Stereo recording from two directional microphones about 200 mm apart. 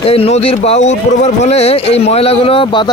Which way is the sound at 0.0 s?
30° left (ahead or behind).